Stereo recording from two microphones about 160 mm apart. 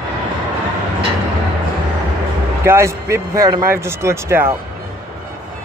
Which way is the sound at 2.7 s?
15° right (ahead or behind).